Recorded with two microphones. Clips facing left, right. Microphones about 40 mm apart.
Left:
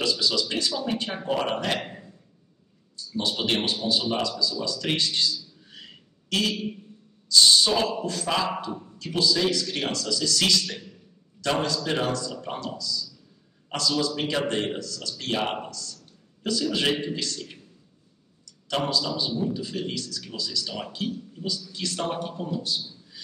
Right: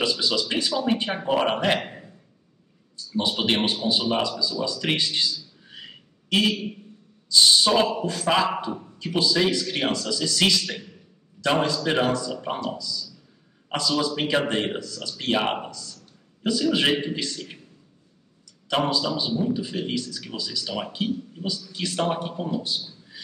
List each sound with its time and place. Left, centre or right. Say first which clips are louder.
0.0 s a man's voice: right 1 dB; centre
3.2 s a man's voice: right 3 dB; right
18.7 s a man's voice: right 3 dB; right